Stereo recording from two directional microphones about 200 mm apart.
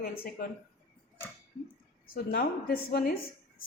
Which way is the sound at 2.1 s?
50° left (ahead or behind).